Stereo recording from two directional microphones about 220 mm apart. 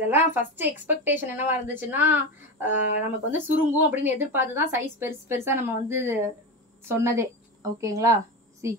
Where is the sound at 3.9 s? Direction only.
10° right (ahead or behind).